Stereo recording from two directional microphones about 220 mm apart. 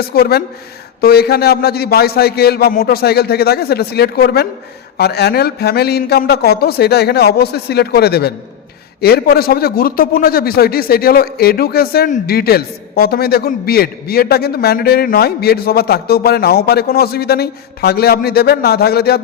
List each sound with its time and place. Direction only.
0.1 s a man's voice: 45° left (ahead or behind)